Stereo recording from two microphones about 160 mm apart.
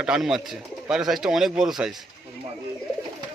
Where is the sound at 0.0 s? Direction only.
5° right (ahead or behind).